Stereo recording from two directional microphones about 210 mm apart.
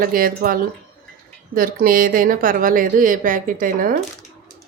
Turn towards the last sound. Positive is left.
turn(degrees=-40)  # may be behind; listen again after turning